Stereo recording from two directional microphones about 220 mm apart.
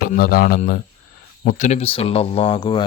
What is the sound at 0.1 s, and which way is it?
Speech, 40° left (ahead or behind).